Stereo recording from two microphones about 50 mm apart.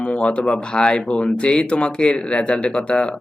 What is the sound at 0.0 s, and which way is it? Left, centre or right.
Speech, left.